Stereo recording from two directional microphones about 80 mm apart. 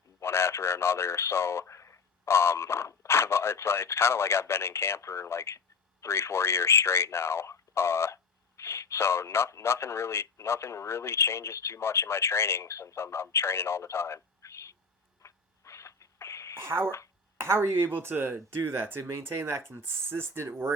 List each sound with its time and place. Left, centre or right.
0.2 s speech: left
15.2 s rodents: left
16.6 s speech: right